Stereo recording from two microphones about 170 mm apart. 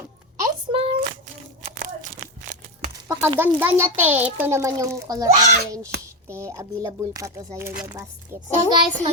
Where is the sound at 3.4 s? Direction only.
15° right (ahead or behind).